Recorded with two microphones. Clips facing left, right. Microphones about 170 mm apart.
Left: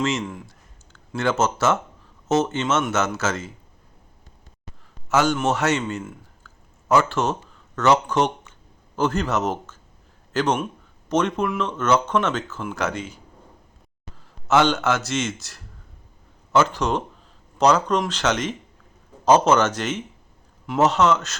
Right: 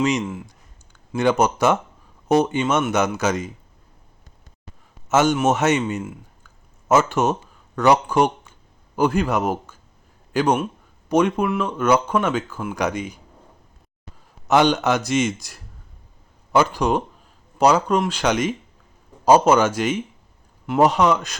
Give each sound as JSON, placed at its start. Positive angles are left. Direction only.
{"t": 0.0, "sound": "speech", "side_deg": -15}
{"t": 5.0, "sound": "a man's voice", "side_deg": -20}
{"t": 14.4, "sound": "speech", "side_deg": -15}